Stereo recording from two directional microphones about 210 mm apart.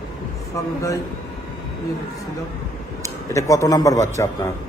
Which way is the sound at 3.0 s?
15° left (ahead or behind).